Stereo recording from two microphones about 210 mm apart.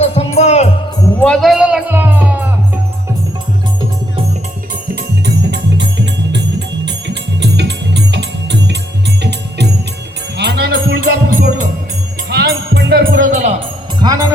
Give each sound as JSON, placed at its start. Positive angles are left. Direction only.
{"t": 0.0, "sound": "music", "side_deg": 30}
{"t": 1.2, "sound": "music", "side_deg": 5}
{"t": 4.9, "sound": "music", "side_deg": -55}
{"t": 10.3, "sound": "music", "side_deg": -55}
{"t": 12.3, "sound": "music", "side_deg": -50}
{"t": 14.0, "sound": "music", "side_deg": -15}